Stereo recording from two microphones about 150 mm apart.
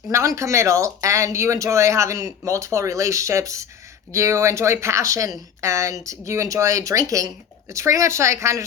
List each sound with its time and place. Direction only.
0.1 s speech: 20° right (ahead or behind)